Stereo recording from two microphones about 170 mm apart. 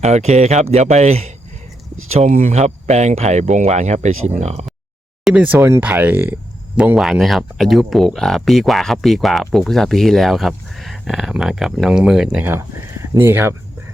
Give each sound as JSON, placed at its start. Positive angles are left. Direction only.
{"t": 0.0, "sound": "speech", "side_deg": -40}
{"t": 5.2, "sound": "speech", "side_deg": -5}